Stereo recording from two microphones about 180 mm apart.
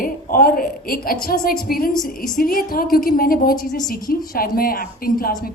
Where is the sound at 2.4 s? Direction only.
55° left (ahead or behind).